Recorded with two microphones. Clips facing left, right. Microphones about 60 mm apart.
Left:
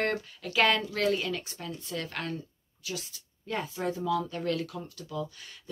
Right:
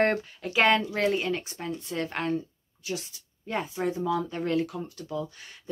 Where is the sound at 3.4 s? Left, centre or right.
Right.